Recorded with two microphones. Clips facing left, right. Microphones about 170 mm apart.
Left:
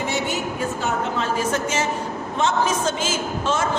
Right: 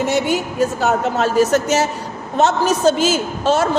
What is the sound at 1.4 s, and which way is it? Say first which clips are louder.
Speech: right 13 dB; 75° right (ahead or behind).